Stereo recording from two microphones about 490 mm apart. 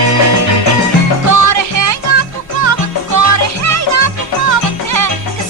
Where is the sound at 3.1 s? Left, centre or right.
Right.